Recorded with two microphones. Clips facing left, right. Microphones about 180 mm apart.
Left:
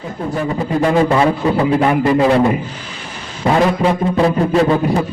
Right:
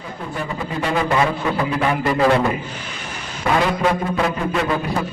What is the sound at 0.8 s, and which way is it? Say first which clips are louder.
A man's voice: left 6 dB; 40° left (ahead or behind).